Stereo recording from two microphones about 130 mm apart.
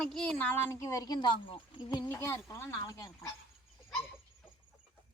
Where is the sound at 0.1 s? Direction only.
5° left (ahead or behind); by 2.0 s 35° left (ahead or behind).